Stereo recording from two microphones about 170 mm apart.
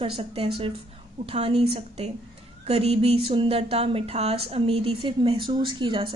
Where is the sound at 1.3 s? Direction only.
35° right (ahead or behind).